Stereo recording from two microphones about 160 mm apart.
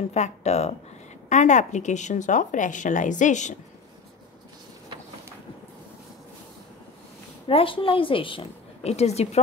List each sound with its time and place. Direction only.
0.1 s speech: 45° left (ahead or behind)
7.4 s a woman's voice: 35° left (ahead or behind)